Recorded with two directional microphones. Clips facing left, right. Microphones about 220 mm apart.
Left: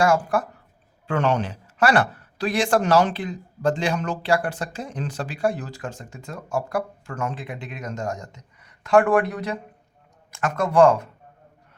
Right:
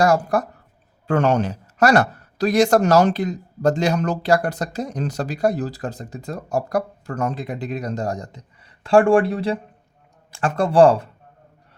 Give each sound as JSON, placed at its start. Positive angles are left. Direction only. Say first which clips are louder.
{"t": 0.0, "sound": "speech", "louder": "right 2 dB", "side_deg": -40}